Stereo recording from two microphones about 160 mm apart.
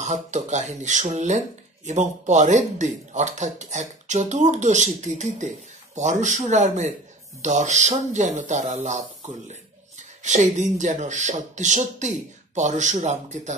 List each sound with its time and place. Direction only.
0.0 s speech: 45° right (ahead or behind)